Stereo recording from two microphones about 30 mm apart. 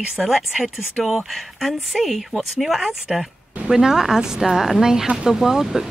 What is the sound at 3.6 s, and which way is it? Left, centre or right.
Speech, centre.